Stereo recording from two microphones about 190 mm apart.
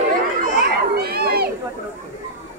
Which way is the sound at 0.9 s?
55° right (ahead or behind).